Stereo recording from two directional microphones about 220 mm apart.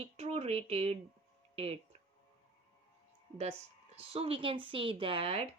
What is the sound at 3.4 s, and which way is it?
Speech, 30° right (ahead or behind).